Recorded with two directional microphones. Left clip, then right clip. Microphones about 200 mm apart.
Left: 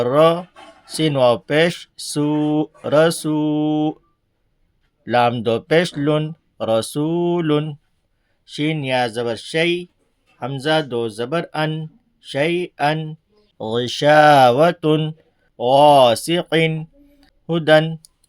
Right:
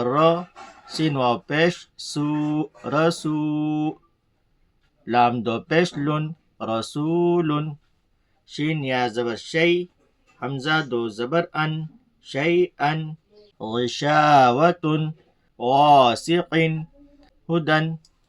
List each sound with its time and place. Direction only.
0.0 s speech: 40° left (ahead or behind)
5.0 s speech: 35° left (ahead or behind)